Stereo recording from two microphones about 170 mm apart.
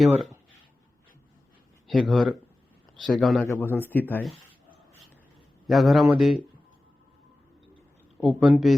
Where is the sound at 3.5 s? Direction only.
10° left (ahead or behind).